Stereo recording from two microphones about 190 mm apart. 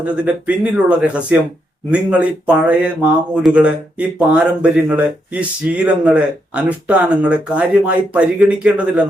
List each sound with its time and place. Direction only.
0.0 s speech: 5° right (ahead or behind)